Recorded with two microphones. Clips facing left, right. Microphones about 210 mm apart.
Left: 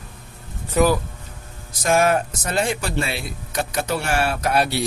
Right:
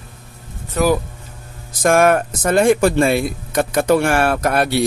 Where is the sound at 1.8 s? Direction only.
55° right (ahead or behind).